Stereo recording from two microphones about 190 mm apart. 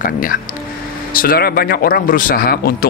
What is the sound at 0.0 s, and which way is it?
Speech, 45° left (ahead or behind).